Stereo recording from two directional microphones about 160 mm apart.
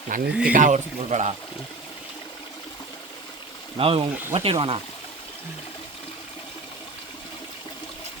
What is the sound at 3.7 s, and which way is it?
Speech, 35° right (ahead or behind).